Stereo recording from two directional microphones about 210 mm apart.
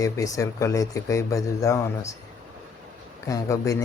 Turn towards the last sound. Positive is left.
turn(degrees=15)  # may be behind; listen again after turning